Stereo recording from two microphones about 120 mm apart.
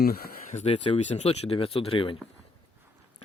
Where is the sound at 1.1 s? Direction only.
60° left (ahead or behind).